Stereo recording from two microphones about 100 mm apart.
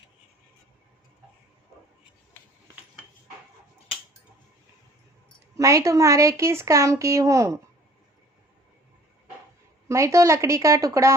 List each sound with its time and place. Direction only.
5.5 s a woman's voice: 35° right (ahead or behind)
9.9 s speech: 30° right (ahead or behind)